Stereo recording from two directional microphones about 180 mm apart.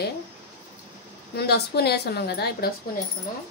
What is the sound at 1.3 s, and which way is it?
Frying, 65° left (ahead or behind).